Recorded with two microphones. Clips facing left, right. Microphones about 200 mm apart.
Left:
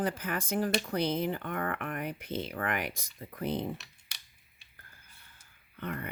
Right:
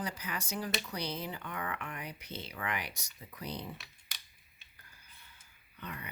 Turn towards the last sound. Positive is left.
turn(degrees=50)  # may be behind; listen again after turning